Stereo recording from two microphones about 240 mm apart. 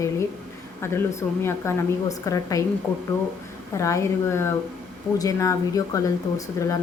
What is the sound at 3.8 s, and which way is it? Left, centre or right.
A woman's voice, centre.